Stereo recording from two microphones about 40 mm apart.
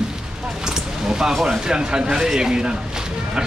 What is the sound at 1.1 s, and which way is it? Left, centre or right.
Speech, centre.